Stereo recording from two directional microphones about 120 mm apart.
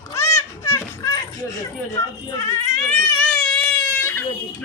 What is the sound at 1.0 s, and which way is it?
Speech, 30° left (ahead or behind).